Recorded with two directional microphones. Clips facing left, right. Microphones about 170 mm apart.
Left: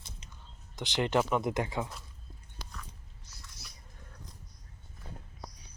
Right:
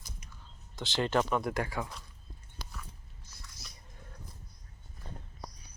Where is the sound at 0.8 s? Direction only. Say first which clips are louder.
Left 1 dB; 20° left (ahead or behind).